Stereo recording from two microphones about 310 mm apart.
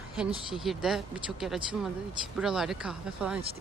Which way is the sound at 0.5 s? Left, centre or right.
Centre.